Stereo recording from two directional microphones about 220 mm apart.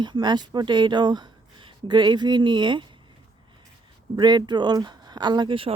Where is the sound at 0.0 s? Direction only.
20° right (ahead or behind).